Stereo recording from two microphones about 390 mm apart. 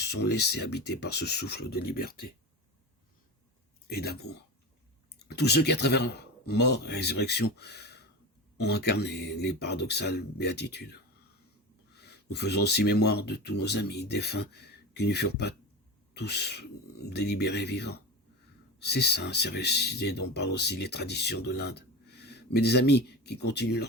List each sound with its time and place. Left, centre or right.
0.0 s speech: left
3.8 s speech: left